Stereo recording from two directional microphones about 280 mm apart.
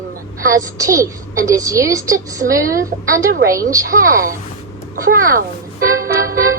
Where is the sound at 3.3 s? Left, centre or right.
Right.